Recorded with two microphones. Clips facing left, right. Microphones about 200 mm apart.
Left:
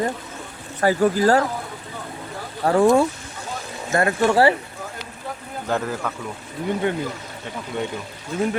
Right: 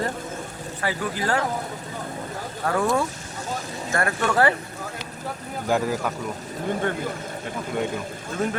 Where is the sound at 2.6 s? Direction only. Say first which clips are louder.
Left 7 dB; 30° left (ahead or behind).